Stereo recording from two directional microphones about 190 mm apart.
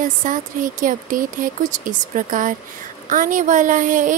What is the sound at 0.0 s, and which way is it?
A woman's voice, 45° right (ahead or behind).